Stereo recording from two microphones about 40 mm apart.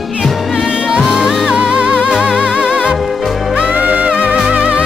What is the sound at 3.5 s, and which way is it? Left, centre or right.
Music, right.